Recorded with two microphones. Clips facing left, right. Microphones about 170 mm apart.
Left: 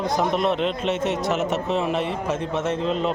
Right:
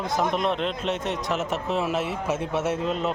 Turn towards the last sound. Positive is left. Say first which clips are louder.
# left 2 dB
turn(degrees=-5)  # may be behind; listen again after turning